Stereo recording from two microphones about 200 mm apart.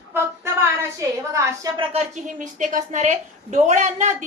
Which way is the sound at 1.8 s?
30° right (ahead or behind).